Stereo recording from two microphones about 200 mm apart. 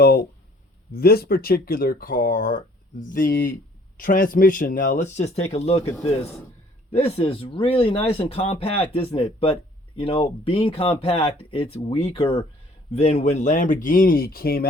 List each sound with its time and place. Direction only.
0.0 s speech: 50° left (ahead or behind); by 5.9 s 30° left (ahead or behind)
6.9 s speech: 30° left (ahead or behind); by 14.7 s 50° left (ahead or behind)